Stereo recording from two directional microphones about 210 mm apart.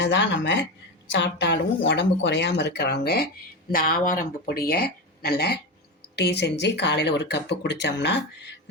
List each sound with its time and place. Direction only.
0.0 s speech: 60° left (ahead or behind)